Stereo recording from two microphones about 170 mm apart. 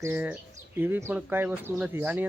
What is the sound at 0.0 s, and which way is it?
Speech, 10° right (ahead or behind).